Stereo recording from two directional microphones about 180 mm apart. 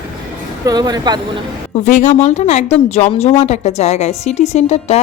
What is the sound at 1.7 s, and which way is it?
A woman's voice, 45° left (ahead or behind).